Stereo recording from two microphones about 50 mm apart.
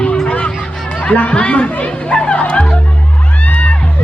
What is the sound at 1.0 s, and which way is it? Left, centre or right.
Speech, left.